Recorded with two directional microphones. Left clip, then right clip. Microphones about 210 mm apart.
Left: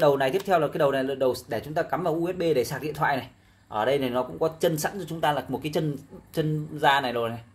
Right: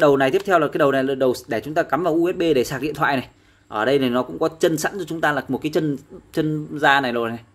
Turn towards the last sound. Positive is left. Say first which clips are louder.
# right 5 dB
turn(degrees=-35)  # may be behind; listen again after turning